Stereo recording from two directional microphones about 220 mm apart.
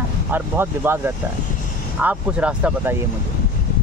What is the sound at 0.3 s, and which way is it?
Speech, 10° right (ahead or behind).